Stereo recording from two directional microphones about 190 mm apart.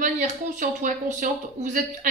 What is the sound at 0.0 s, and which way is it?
Speech, 40° right (ahead or behind).